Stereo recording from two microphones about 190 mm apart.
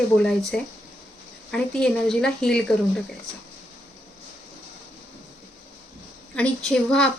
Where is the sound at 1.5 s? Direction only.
5° left (ahead or behind).